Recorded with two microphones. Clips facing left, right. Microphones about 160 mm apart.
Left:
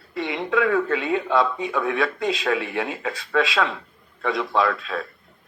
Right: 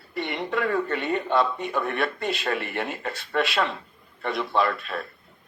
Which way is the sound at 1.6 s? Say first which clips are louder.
Left 3 dB; 90° left.